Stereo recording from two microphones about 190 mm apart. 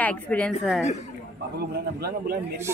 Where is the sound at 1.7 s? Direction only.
55° right (ahead or behind).